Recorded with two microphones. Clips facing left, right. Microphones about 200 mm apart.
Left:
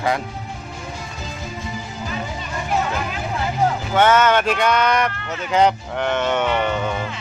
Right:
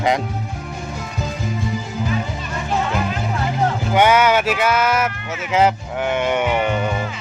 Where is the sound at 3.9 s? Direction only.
10° right (ahead or behind).